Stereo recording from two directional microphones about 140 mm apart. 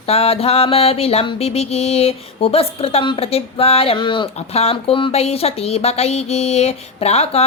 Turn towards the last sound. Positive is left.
turn(degrees=50)  # may be behind; listen again after turning